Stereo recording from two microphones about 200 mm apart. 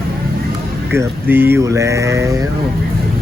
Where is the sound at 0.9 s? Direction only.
10° right (ahead or behind).